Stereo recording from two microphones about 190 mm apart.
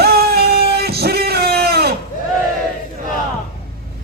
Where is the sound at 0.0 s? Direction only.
55° right (ahead or behind).